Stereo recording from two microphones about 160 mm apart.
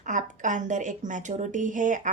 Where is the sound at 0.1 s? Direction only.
50° right (ahead or behind).